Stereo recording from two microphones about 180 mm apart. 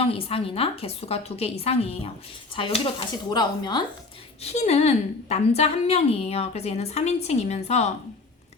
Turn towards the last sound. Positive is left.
turn(degrees=35)  # may be behind; listen again after turning